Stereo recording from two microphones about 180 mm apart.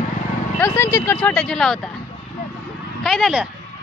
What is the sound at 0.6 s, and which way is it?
Vehicle, 15° left (ahead or behind).